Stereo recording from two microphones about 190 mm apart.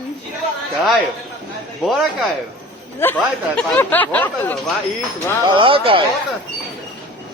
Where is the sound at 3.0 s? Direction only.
10° left (ahead or behind).